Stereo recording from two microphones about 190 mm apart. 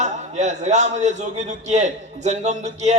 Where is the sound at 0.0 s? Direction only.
40° right (ahead or behind).